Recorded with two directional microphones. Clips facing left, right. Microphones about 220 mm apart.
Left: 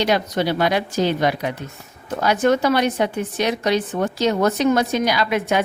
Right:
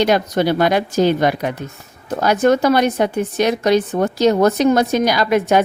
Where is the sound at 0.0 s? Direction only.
45° right (ahead or behind).